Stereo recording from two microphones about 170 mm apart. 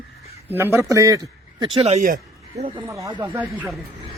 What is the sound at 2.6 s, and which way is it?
Speech, 35° right (ahead or behind).